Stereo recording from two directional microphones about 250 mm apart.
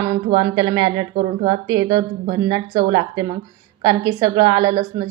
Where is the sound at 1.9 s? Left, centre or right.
Right.